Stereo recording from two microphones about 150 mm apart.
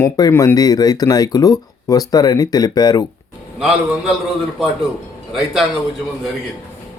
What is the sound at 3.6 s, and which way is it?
Speech, centre (ahead or behind).